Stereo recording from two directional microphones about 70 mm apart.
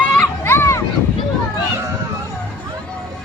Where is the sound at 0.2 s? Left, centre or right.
Left.